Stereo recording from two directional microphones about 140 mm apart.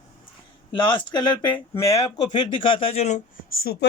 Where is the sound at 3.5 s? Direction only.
90° left.